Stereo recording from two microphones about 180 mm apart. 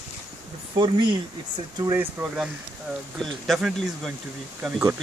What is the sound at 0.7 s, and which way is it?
Speech, 25° right (ahead or behind).